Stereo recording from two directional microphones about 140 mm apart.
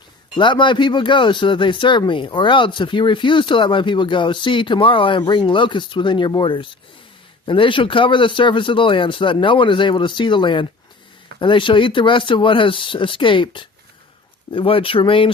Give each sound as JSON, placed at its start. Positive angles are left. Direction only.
{"t": 0.3, "sound": "speech", "side_deg": 35}